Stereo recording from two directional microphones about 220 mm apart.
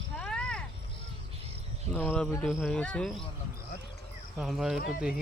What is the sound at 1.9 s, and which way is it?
Speech, 5° left (ahead or behind).